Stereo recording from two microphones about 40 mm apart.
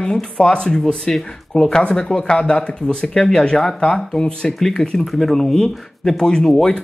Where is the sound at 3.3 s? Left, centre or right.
Centre.